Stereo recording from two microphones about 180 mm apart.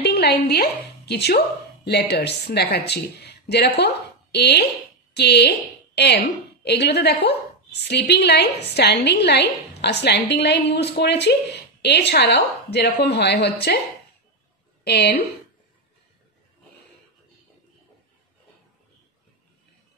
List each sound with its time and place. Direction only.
0.0 s a woman's voice: 65° left (ahead or behind)
14.9 s a woman's voice: 65° left (ahead or behind)